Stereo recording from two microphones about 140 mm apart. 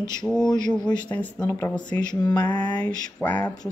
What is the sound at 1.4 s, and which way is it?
Speech, 20° left (ahead or behind).